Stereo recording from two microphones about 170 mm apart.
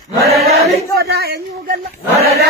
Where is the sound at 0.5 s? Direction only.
40° right (ahead or behind).